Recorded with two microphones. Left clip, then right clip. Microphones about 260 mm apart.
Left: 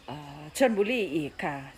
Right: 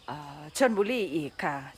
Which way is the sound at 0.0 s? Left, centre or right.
Centre.